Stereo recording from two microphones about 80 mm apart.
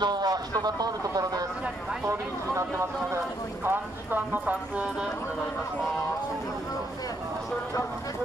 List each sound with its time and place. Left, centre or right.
0.0 s speech: right
2.0 s speech: right
3.6 s speech: right